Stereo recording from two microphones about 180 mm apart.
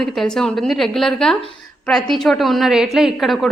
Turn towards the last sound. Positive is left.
turn(degrees=0)  # may be behind; listen again after turning